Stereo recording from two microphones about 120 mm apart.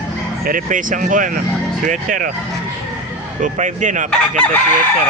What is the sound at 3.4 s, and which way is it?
Speech, 90° right.